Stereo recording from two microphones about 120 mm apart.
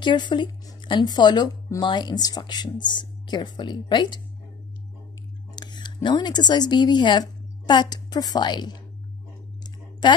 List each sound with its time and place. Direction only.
0.0 s speech: 40° left (ahead or behind)
5.6 s tick-tock: 40° left (ahead or behind)
6.0 s speech: 40° left (ahead or behind)
9.6 s clicking: 35° left (ahead or behind)